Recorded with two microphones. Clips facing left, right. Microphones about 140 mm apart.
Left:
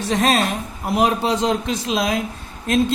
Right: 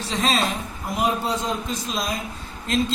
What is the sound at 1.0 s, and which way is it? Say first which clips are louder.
A man's voice: left 5 dB; 85° left.